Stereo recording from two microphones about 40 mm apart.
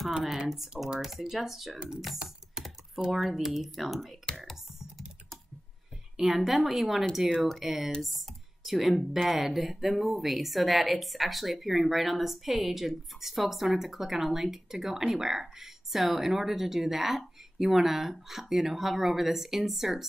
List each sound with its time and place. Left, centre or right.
0.9 s speech: centre
2.6 s typing: centre
3.1 s speech: centre
6.1 s speech: centre